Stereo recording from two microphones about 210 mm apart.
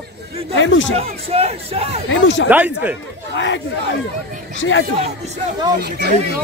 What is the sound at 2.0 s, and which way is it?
Speech, 60° left (ahead or behind).